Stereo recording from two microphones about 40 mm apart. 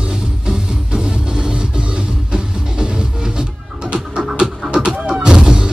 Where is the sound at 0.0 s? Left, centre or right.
Centre.